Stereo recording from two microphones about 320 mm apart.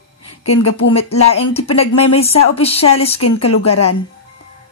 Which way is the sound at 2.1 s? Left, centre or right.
Centre.